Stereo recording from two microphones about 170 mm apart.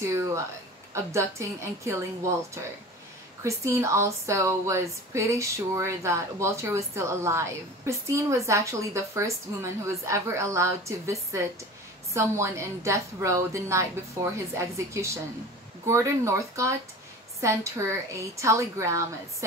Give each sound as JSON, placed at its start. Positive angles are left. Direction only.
{"t": 0.0, "sound": "a sound", "side_deg": -15}
{"t": 0.9, "sound": "speech", "side_deg": -15}
{"t": 3.4, "sound": "speech", "side_deg": -15}